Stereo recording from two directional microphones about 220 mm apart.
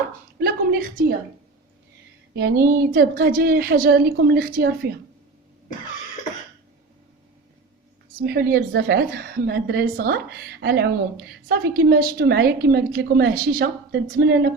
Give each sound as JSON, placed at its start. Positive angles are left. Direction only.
{"t": 0.3, "sound": "a sound", "side_deg": -45}
{"t": 2.7, "sound": "a woman's voice", "side_deg": -40}
{"t": 8.2, "sound": "a woman's voice", "side_deg": -45}